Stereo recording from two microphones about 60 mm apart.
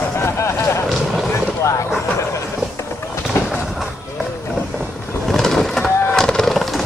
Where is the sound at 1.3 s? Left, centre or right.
Left.